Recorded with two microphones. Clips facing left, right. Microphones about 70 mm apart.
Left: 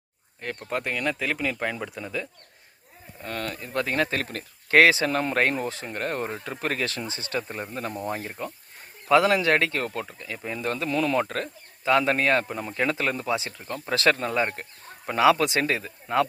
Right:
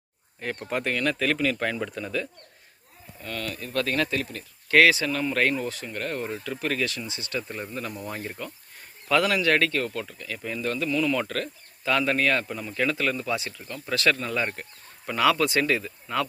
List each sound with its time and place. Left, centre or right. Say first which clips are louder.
0.3 s speech: right 1 dB; centre
0.9 s speech: right 2 dB; centre
3.2 s a man's voice: left 1 dB; left
4.1 s speech: even; left
4.7 s speech: left 1 dB; left
8.1 s speech: left 2 dB; centre
9.0 s a man's voice: left 3 dB; left
10.7 s speech: even; left
11.2 s a man's voice: left 2 dB; left
13.5 s a man's voice: left 2 dB; left